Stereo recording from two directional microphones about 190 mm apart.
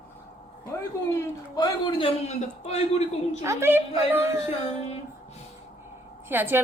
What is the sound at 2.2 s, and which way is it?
A man's voice, 35° left (ahead or behind).